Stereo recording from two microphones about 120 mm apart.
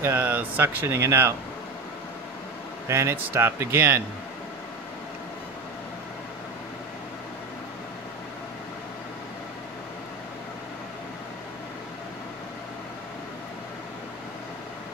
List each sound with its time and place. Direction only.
0.0 s speech: 15° right (ahead or behind)
2.9 s speech: 20° right (ahead or behind)